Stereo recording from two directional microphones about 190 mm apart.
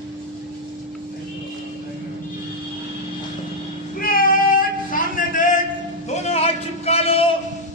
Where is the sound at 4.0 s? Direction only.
50° left (ahead or behind).